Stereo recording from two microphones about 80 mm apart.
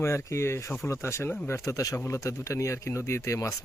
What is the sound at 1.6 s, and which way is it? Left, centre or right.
A man's voice, left.